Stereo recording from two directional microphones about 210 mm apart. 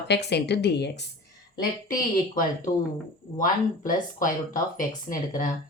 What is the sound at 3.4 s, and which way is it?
Speech, 40° left (ahead or behind).